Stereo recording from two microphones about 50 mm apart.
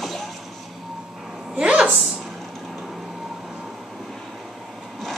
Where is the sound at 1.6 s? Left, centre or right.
Centre.